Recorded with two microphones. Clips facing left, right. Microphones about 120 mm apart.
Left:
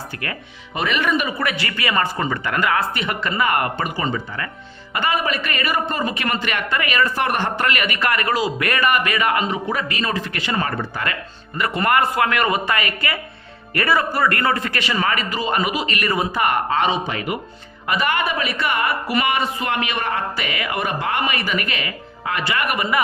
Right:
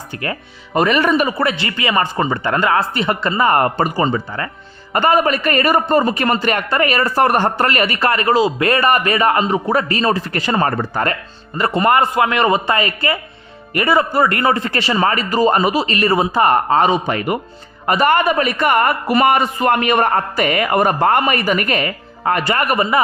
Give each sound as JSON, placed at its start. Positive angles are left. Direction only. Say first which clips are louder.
{"t": 0.2, "sound": "a man's voice", "louder": "right 5 dB", "side_deg": -35}